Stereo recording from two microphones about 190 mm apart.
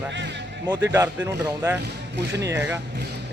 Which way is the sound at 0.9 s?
10° right (ahead or behind).